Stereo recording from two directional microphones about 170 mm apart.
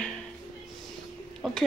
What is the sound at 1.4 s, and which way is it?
Speech, centre (ahead or behind).